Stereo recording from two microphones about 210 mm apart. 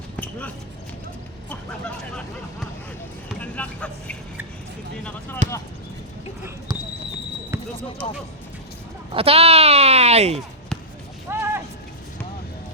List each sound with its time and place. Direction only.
0.2 s a sound: 5° left (ahead or behind)
3.4 s vehicle: 5° left (ahead or behind)
5.4 s basketball bounce: 35° right (ahead or behind)
7.5 s basketball bounce: 15° right (ahead or behind)
9.1 s speech: 30° right (ahead or behind)
11.3 s a sound: 10° right (ahead or behind)